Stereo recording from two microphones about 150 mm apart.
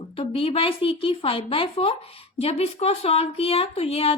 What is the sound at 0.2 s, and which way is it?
A woman's voice, 40° left (ahead or behind).